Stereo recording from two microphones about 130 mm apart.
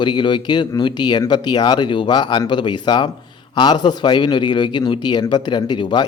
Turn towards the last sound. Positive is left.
turn(degrees=35)  # may be behind; listen again after turning